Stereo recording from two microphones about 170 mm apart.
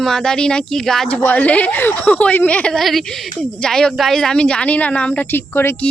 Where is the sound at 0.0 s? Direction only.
Centre (ahead or behind).